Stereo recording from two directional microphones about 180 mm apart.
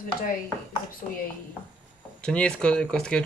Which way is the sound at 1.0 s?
40° left (ahead or behind).